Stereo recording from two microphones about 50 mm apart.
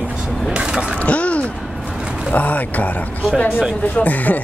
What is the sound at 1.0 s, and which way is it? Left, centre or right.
Speech, left.